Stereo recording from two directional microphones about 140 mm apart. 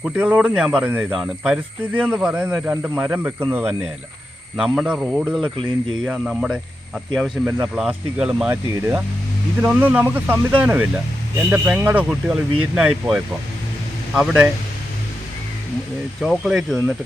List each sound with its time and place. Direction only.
0.0 s speech: 10° right (ahead or behind)
4.5 s speech: 5° right (ahead or behind)
8.7 s speech: 20° right (ahead or behind)
16.2 s speech: 5° right (ahead or behind)